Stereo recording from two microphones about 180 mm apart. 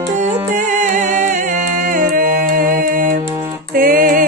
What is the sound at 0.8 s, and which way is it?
Music, 40° right (ahead or behind).